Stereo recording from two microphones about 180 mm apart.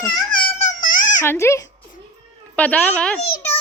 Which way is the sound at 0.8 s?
50° left (ahead or behind).